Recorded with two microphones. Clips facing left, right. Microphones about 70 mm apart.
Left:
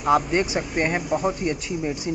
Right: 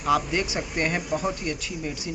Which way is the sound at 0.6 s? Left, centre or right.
Centre.